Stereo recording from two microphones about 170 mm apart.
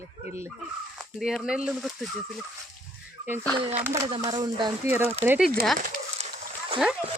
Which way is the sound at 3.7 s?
15° right (ahead or behind).